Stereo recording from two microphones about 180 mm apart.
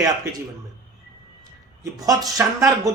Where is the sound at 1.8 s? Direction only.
20° right (ahead or behind).